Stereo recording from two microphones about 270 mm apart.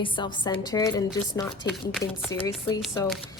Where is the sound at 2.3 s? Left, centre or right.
Centre.